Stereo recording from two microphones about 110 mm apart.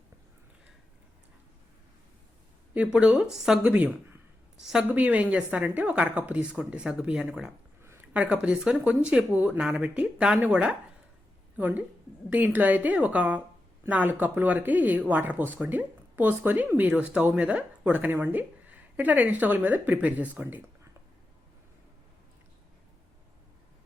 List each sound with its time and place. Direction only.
2.7 s speech: 10° right (ahead or behind)
3.6 s speech: 15° right (ahead or behind)